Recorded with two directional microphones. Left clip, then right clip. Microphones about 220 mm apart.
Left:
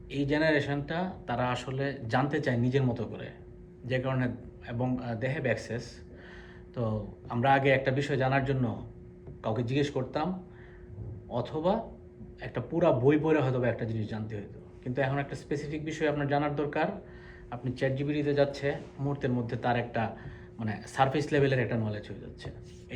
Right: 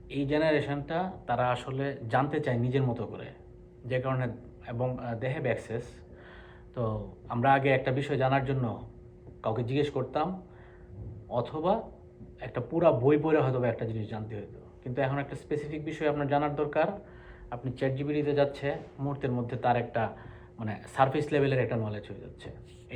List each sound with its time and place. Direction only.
0.1 s speech: 15° right (ahead or behind)
11.3 s speech: 15° right (ahead or behind)